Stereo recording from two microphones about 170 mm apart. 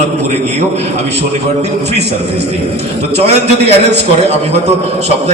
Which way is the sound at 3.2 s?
40° right (ahead or behind).